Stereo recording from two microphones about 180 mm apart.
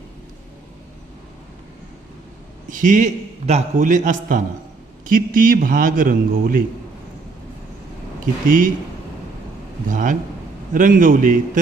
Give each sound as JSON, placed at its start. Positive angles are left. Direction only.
{"t": 2.6, "sound": "a man's voice", "side_deg": -45}
{"t": 8.4, "sound": "a man's voice", "side_deg": -45}
{"t": 9.9, "sound": "a man's voice", "side_deg": -45}